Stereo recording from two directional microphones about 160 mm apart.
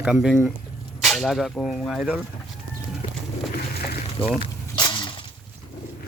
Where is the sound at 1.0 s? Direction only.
Centre (ahead or behind).